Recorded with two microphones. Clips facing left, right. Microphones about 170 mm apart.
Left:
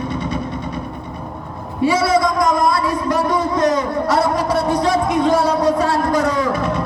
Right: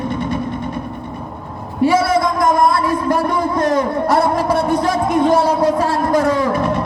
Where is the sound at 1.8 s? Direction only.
50° right (ahead or behind).